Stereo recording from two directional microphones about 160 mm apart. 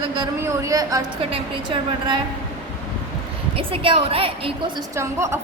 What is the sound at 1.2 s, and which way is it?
A woman's voice, 35° right (ahead or behind).